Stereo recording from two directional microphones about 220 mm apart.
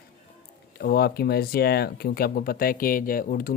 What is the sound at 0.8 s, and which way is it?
Speech, 45° left (ahead or behind).